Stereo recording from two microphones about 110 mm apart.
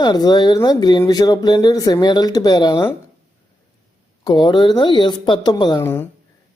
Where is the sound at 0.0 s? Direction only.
40° left (ahead or behind).